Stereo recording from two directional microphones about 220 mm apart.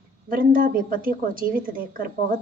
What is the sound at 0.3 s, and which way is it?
A woman's voice, 40° right (ahead or behind).